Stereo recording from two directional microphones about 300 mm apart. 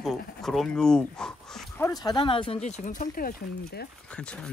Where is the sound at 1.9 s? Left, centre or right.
Centre; by 3.8 s left.